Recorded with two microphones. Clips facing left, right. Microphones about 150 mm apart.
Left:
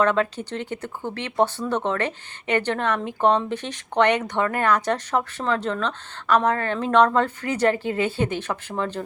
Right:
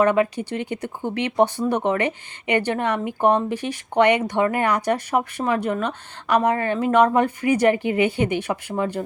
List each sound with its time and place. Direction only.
0.0 s speech: 10° right (ahead or behind)